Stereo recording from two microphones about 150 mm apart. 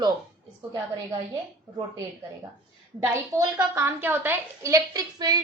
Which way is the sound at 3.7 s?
15° right (ahead or behind).